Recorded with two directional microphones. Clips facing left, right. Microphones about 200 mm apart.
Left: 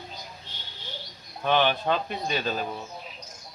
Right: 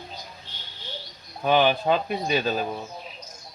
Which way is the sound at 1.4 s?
10° right (ahead or behind).